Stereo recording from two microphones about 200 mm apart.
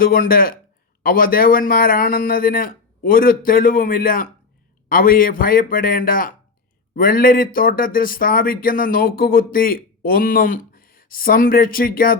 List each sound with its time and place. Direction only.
0.0 s speech: 45° left (ahead or behind)